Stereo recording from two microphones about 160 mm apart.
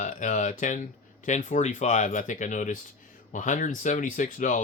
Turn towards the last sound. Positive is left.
turn(degrees=55)  # may be behind; listen again after turning